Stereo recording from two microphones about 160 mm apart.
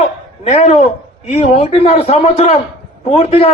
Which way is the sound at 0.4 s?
40° left (ahead or behind).